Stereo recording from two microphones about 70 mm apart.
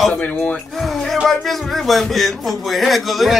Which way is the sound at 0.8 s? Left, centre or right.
Centre.